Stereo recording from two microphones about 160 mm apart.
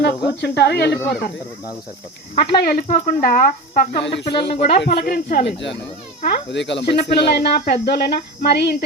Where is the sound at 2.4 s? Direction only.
65° left (ahead or behind).